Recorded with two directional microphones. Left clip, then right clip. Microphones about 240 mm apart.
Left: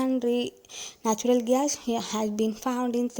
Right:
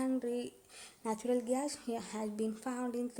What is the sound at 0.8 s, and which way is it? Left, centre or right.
Speech, left.